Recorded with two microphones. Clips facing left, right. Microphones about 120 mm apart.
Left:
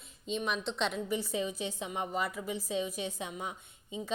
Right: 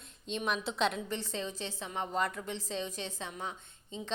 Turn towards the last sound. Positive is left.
turn(degrees=10)  # may be behind; listen again after turning